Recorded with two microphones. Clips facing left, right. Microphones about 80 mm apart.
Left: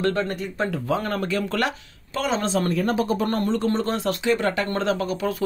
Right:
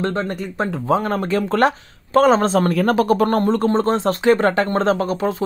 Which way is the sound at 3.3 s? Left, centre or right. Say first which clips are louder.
Right 6 dB; right.